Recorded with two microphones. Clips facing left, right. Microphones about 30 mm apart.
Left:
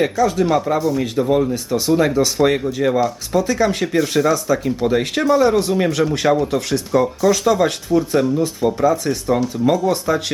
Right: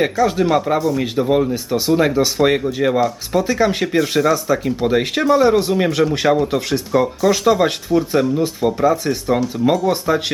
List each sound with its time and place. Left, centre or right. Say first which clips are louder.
0.0 s speech: right 1 dB; right